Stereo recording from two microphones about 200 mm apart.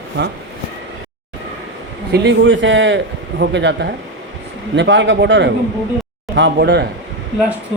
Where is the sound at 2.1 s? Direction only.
60° right (ahead or behind).